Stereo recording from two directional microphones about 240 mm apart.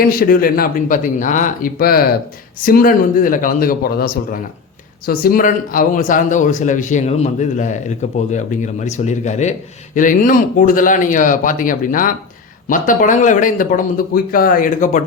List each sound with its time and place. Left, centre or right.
0.0 s a man's voice: left